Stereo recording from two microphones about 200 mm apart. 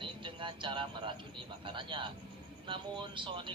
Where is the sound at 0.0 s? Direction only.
25° right (ahead or behind).